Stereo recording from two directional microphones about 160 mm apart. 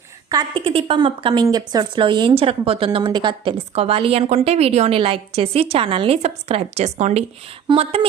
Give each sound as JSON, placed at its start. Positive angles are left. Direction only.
{"t": 0.3, "sound": "a woman's voice", "side_deg": -30}